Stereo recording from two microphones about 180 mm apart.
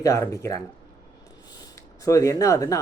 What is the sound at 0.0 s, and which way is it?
Speech, 20° left (ahead or behind).